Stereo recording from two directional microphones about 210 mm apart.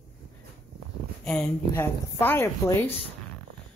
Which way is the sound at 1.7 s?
10° left (ahead or behind).